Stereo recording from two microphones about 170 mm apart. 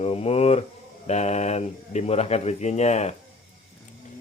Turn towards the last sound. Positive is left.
turn(degrees=40)  # may be behind; listen again after turning